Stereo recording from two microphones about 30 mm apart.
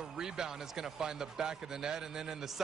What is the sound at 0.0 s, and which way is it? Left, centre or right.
Speech, centre.